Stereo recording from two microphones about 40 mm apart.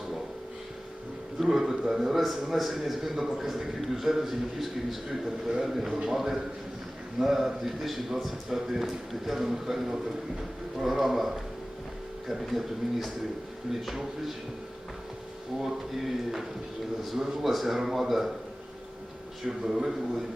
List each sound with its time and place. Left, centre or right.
1.4 s a man's voice: centre
12.3 s a man's voice: centre
15.6 s a man's voice: centre
19.5 s a man's voice: centre